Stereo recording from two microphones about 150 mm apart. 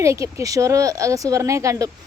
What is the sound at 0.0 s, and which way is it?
Speech, 20° right (ahead or behind).